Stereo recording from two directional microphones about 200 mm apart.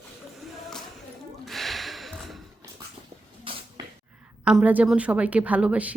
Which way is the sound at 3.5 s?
25° right (ahead or behind).